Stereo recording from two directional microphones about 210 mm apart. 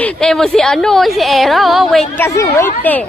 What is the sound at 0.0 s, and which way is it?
A woman's voice, 5° left (ahead or behind).